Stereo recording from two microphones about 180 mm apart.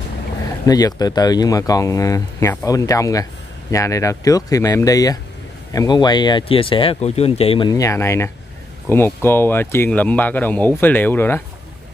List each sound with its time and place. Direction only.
0.7 s speech: 20° left (ahead or behind)